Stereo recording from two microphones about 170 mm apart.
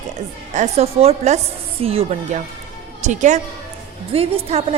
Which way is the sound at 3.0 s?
45° right (ahead or behind).